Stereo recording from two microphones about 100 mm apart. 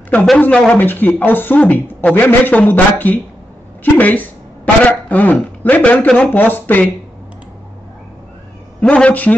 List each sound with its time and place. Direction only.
0.4 s a woman's voice: 10° left (ahead or behind)
8.8 s speech: 10° left (ahead or behind)